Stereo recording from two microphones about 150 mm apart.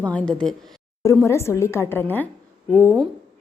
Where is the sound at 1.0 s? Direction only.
20° left (ahead or behind).